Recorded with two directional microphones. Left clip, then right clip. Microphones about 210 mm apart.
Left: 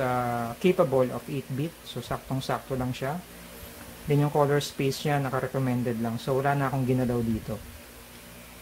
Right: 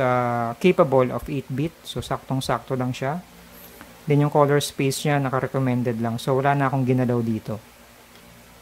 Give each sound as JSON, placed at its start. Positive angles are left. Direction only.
{"t": 0.0, "sound": "speech", "side_deg": -20}